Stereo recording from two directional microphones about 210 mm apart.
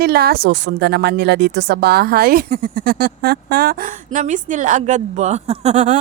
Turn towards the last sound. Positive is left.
turn(degrees=-35)  # may be behind; listen again after turning